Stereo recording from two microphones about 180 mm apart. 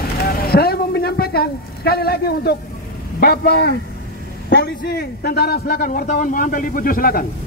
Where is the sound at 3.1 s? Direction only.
60° left (ahead or behind).